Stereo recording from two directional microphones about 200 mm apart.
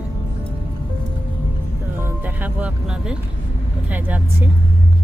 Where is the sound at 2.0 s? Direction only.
10° right (ahead or behind).